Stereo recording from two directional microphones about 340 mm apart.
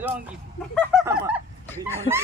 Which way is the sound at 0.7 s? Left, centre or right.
Centre.